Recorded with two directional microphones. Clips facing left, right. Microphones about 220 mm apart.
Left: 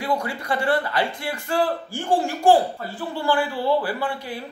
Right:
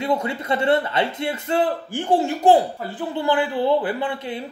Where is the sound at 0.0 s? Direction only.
20° right (ahead or behind).